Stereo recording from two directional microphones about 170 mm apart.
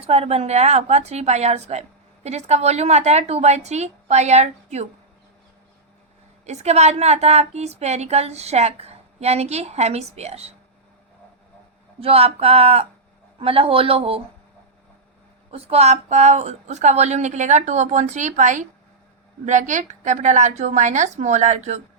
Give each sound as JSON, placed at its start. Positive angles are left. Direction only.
{"t": 0.0, "sound": "a woman's voice", "side_deg": -35}
{"t": 6.4, "sound": "a woman's voice", "side_deg": -40}
{"t": 11.9, "sound": "a woman's voice", "side_deg": -35}
{"t": 15.5, "sound": "a woman's voice", "side_deg": -35}